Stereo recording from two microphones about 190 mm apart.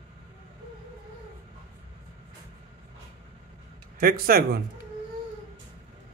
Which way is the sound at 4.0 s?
50° right (ahead or behind).